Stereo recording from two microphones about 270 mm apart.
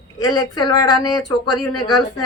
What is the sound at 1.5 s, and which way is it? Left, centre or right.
Speech, left.